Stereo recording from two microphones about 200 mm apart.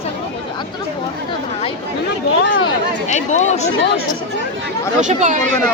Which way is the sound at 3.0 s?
35° left (ahead or behind).